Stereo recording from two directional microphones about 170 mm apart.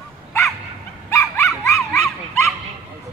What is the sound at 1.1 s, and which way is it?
Dog, 15° left (ahead or behind).